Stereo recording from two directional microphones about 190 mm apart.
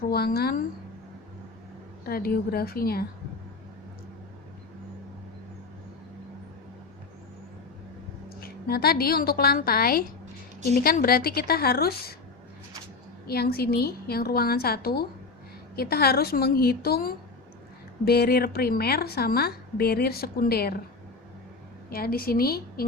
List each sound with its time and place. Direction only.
0.1 s a woman's voice: 55° left (ahead or behind)
2.0 s a woman's voice: 55° left (ahead or behind)
8.4 s a woman's voice: 55° left (ahead or behind)
13.2 s a woman's voice: 55° left (ahead or behind)
21.8 s a woman's voice: 50° left (ahead or behind)